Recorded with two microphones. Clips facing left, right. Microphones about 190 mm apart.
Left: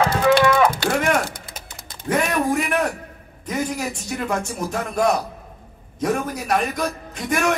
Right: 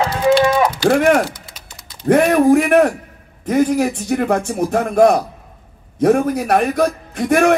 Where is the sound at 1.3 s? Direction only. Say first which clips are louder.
Left 2 dB; 50° left (ahead or behind).